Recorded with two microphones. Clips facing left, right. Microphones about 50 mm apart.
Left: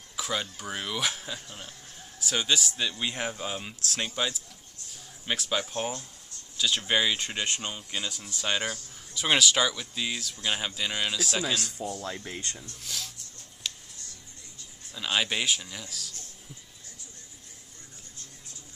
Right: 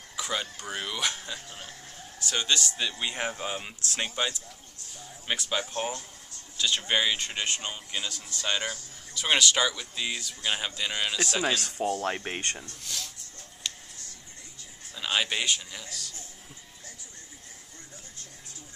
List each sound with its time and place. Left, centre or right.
0.1 s speech: centre
2.8 s speech: centre
8.2 s speech: centre
8.6 s speech: centre
11.4 s speech: right
12.8 s speech: centre
13.6 s a sound: centre
15.0 s speech: centre